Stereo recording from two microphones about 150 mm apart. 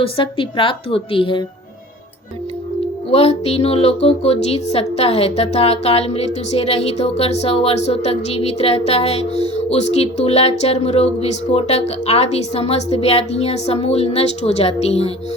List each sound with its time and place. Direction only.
0.0 s a woman's voice: 35° left (ahead or behind)
3.1 s speech: 45° left (ahead or behind)